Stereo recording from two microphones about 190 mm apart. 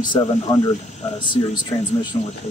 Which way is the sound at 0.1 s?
20° left (ahead or behind).